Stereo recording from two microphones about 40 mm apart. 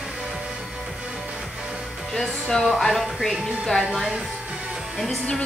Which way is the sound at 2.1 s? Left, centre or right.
Centre.